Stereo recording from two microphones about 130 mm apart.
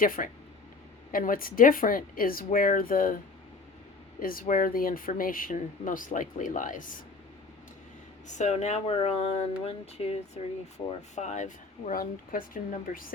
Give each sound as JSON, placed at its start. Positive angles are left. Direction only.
{"t": 0.0, "sound": "speech", "side_deg": 90}
{"t": 4.2, "sound": "speech", "side_deg": 90}
{"t": 8.3, "sound": "speech", "side_deg": 65}
{"t": 11.1, "sound": "speech", "side_deg": 65}